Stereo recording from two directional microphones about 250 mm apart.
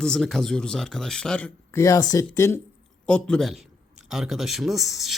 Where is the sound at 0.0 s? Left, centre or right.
Centre.